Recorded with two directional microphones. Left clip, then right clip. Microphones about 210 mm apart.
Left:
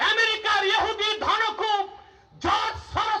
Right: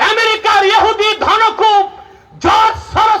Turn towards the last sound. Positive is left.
turn(degrees=-40)  # may be behind; listen again after turning